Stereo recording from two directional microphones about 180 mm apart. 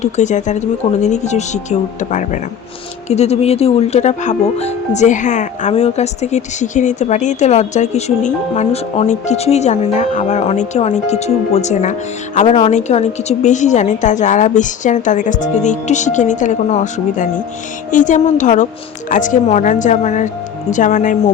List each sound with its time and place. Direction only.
0.0 s speech: 40° left (ahead or behind)